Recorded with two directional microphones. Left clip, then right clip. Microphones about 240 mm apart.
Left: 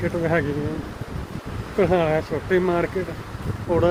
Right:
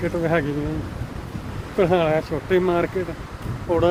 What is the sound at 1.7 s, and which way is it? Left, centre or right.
Speech, centre.